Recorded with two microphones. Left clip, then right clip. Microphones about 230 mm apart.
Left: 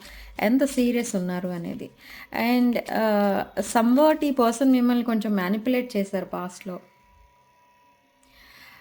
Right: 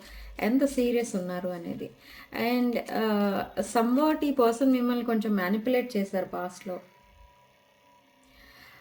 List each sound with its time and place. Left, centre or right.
0.3 s speech: left
8.4 s music: left